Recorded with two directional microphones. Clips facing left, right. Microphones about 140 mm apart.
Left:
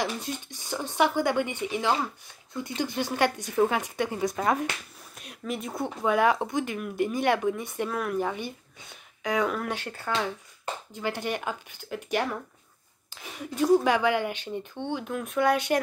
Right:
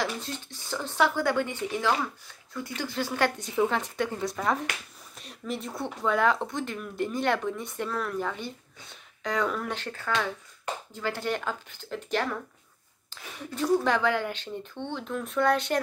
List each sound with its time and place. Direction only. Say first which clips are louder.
0.0 s speech: left 1 dB; 15° left (ahead or behind)